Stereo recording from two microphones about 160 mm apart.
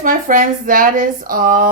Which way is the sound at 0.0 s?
60° right (ahead or behind).